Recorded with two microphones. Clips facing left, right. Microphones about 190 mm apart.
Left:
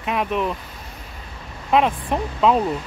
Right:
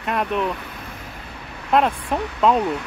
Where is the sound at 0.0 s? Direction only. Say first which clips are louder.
Even; centre (ahead or behind).